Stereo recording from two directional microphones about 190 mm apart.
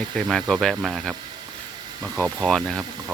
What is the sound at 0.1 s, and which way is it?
Speech, centre (ahead or behind).